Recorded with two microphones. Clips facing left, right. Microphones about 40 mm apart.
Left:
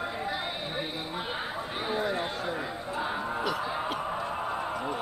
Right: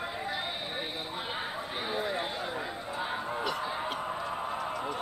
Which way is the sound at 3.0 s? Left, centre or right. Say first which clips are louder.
Left 3 dB; centre.